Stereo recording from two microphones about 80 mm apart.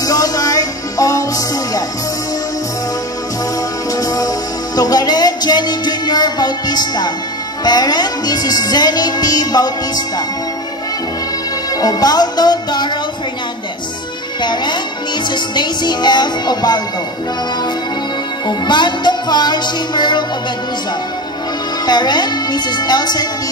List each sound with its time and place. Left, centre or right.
0.0 s music: left
3.9 s music: left
11.8 s music: left
14.4 s speech: left
15.2 s music: left
18.5 s music: left
21.8 s music: left